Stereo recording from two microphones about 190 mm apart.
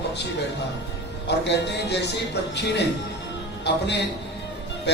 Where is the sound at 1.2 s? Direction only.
65° left (ahead or behind).